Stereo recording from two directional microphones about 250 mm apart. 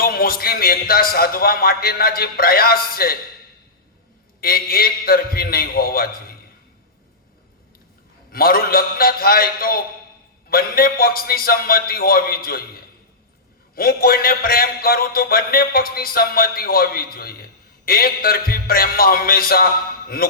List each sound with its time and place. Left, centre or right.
0.0 s a man's voice: left
4.4 s a man's voice: left
8.3 s a man's voice: left